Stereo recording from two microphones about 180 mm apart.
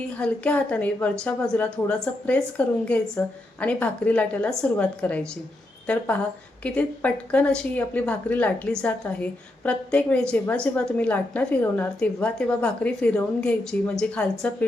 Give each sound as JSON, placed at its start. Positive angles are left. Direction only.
{"t": 0.2, "sound": "a woman's voice", "side_deg": 5}